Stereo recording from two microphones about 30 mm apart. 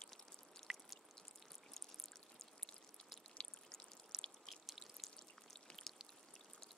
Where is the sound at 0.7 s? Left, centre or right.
Right.